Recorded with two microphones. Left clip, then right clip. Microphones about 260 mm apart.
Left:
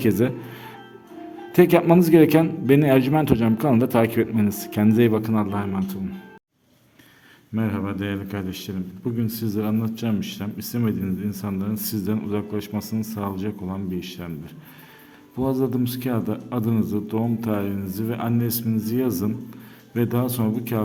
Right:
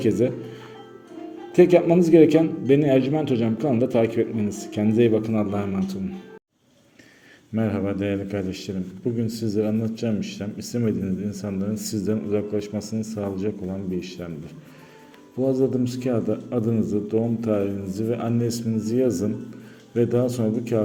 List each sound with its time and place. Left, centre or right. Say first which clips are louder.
0.0 s a man's voice: even; left
7.5 s a man's voice: right 2 dB; centre
15.4 s a man's voice: right 2 dB; left